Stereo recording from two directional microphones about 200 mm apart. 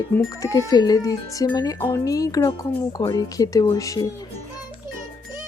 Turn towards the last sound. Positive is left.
turn(degrees=15)  # may be behind; listen again after turning